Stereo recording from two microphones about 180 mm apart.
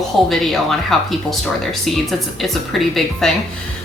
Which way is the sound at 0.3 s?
Centre (ahead or behind).